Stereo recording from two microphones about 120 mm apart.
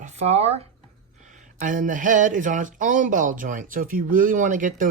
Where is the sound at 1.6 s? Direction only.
90° right.